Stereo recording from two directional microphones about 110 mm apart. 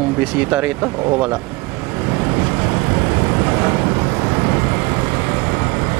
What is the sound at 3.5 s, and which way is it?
Vehicle, 15° right (ahead or behind).